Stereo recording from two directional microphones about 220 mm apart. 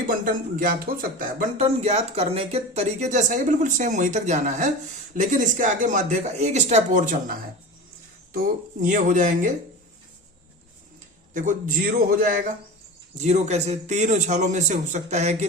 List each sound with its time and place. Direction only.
0.1 s speech: 40° right (ahead or behind)
11.3 s speech: 35° right (ahead or behind)